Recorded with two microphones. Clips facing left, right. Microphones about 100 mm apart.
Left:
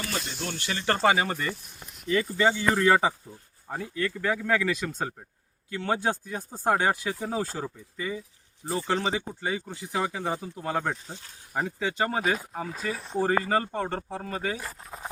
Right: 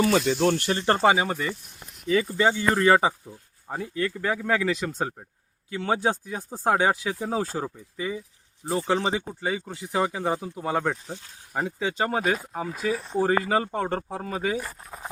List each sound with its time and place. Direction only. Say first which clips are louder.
0.2 s speech: right 12 dB; 80° right; by 0.7 s 60° right (ahead or behind)
0.7 s speech: right 5 dB; 35° right (ahead or behind)
0.9 s speech: left 1 dB; 15° right (ahead or behind)
3.7 s speech: right 2 dB; 20° right (ahead or behind)
9.4 s speech: right 2 dB; 5° right (ahead or behind)